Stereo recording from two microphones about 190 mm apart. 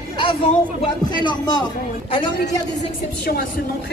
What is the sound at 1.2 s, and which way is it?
Speech, 25° left (ahead or behind).